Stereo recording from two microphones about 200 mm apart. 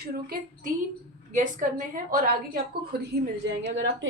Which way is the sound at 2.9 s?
50° right (ahead or behind).